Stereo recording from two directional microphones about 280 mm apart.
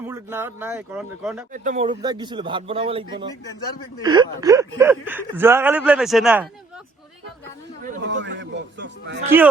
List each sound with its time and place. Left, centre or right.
0.0 s speech: centre
1.5 s speech: right; by 6.5 s centre
7.9 s a man's voice: right